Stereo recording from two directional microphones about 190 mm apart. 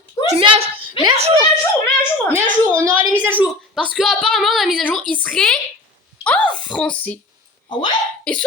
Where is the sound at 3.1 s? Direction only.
10° right (ahead or behind); by 7.2 s 5° left (ahead or behind).